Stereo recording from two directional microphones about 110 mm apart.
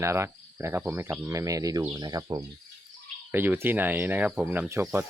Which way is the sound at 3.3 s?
20° right (ahead or behind).